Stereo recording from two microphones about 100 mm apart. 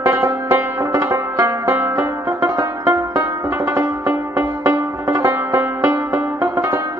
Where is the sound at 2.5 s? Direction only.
35° right (ahead or behind).